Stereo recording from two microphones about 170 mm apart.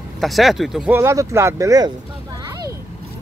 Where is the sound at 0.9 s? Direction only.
15° right (ahead or behind).